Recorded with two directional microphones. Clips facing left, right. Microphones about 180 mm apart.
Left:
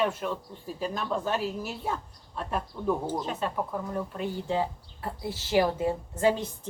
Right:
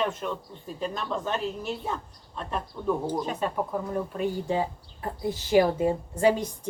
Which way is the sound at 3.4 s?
10° right (ahead or behind).